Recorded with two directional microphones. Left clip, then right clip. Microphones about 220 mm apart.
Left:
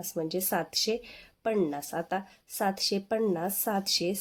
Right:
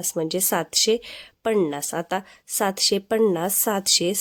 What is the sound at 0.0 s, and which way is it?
A woman's voice, 35° right (ahead or behind).